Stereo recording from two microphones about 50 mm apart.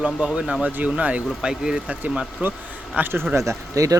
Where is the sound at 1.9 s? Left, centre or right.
Right.